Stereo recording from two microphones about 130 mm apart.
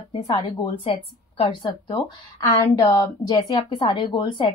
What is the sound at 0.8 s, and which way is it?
A woman's voice, 45° left (ahead or behind).